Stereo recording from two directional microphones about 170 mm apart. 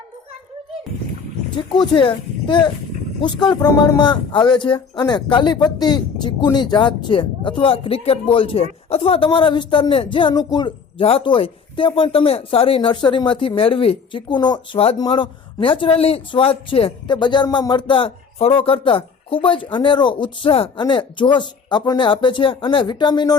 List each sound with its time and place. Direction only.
1.5 s speech: 25° left (ahead or behind)